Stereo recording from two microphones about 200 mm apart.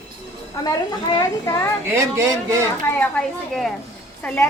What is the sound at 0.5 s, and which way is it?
A woman's voice, 20° left (ahead or behind).